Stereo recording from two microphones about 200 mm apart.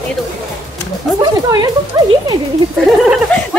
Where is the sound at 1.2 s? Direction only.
20° right (ahead or behind).